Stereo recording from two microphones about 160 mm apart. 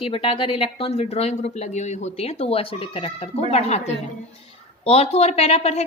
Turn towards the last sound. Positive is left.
turn(degrees=40)  # may be behind; listen again after turning